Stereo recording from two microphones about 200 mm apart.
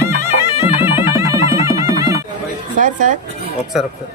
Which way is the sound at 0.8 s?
10° right (ahead or behind).